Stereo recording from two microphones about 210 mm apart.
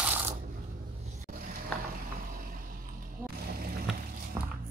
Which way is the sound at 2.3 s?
45° right (ahead or behind).